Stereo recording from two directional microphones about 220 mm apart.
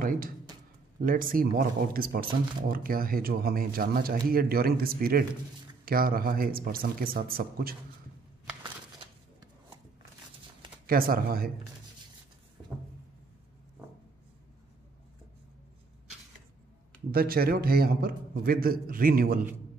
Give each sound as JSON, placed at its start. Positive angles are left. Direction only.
{"t": 0.0, "sound": "a sound", "side_deg": -40}
{"t": 1.0, "sound": "speech", "side_deg": -40}
{"t": 10.9, "sound": "speech", "side_deg": -40}
{"t": 17.1, "sound": "a man's voice", "side_deg": -45}